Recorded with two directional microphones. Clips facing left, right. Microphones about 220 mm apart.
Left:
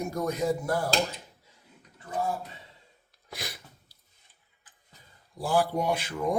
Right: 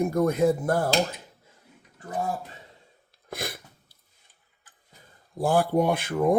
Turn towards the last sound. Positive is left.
turn(degrees=-55)  # may be behind; listen again after turning